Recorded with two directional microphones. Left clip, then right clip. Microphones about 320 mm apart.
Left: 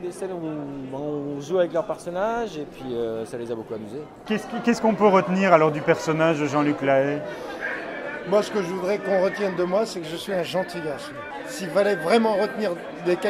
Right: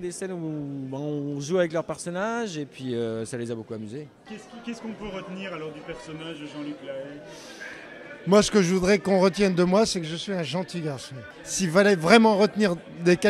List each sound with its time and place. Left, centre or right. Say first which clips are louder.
0.9 s speech: left 3 dB; right
4.6 s a man's voice: left 19 dB; centre
8.3 s speech: right 3 dB; right